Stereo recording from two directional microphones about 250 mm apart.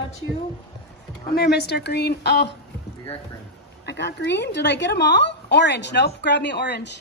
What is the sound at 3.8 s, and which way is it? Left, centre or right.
A woman's voice, left.